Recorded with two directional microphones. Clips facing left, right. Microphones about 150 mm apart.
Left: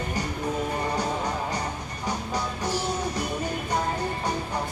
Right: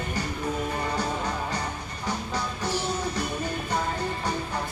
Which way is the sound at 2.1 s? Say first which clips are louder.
Left 1 dB; 15° left (ahead or behind).